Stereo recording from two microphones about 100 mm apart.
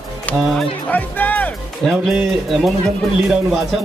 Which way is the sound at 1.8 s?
5° left (ahead or behind).